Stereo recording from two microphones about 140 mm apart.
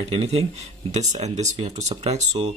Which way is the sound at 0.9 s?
55° right (ahead or behind).